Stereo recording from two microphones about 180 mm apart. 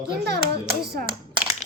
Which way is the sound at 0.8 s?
65° right (ahead or behind).